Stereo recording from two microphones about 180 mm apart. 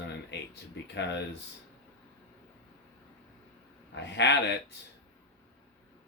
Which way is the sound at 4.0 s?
75° left (ahead or behind).